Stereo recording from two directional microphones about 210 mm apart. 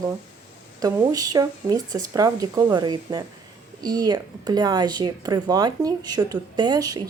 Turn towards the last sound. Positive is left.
turn(degrees=-20)  # may be behind; listen again after turning